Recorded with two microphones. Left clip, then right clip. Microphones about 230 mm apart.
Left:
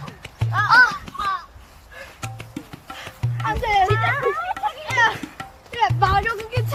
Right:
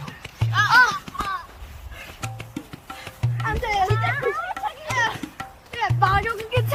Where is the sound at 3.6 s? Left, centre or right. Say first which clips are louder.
Left 5 dB; left.